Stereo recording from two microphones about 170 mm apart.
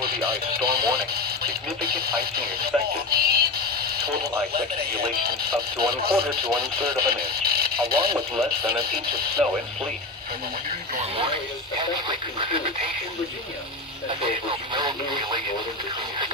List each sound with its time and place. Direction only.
0.3 s speech: 65° right (ahead or behind)
11.8 s speech: 30° right (ahead or behind)
14.1 s speech: 30° right (ahead or behind)